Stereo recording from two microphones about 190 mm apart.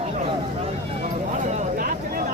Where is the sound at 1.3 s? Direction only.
40° right (ahead or behind).